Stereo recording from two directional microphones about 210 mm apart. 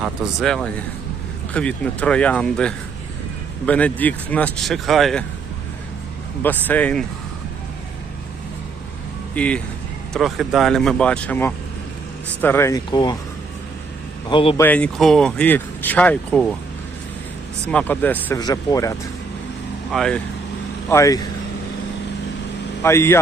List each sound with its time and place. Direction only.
0.0 s speech: 5° right (ahead or behind)
6.4 s speech: 10° left (ahead or behind)
9.3 s speech: 5° left (ahead or behind)
14.3 s speech: 20° left (ahead or behind)
14.6 s speech: 5° left (ahead or behind)
17.7 s speech: 5° left (ahead or behind)
19.9 s speech: 5° left (ahead or behind)
20.9 s speech: 15° left (ahead or behind)
22.8 s speech: 10° left (ahead or behind)